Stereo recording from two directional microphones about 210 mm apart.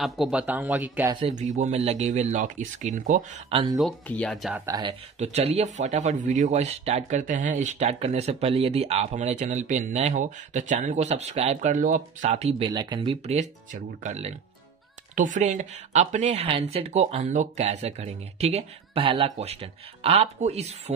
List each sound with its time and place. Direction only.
0.0 s speech: 5° right (ahead or behind)
1.2 s speech: 35° right (ahead or behind)
3.7 s speech: 5° left (ahead or behind)
4.6 s speech: 20° right (ahead or behind)